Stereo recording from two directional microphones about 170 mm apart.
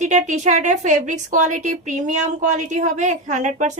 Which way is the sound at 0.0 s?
45° right (ahead or behind).